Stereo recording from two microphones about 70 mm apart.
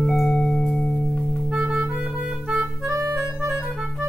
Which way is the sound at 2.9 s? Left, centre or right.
Right.